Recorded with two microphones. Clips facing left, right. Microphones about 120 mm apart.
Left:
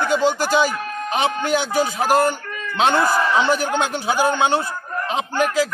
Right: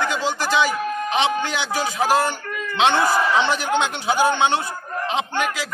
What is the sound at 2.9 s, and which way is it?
Speech, centre (ahead or behind).